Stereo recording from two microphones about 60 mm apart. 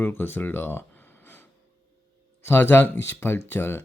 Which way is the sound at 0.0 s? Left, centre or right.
Left.